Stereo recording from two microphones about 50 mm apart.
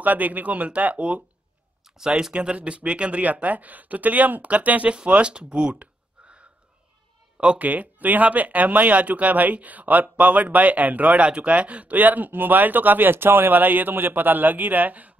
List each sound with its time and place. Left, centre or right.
0.0 s speech: right
2.0 s speech: centre
7.6 s speech: right